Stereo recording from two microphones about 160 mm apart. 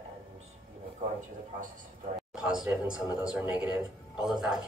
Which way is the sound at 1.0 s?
50° right (ahead or behind).